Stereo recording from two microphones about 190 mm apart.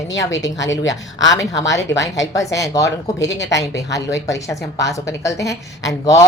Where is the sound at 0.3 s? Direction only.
20° left (ahead or behind).